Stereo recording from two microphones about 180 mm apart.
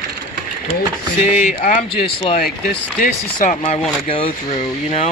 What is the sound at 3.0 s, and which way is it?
Speech, 45° left (ahead or behind).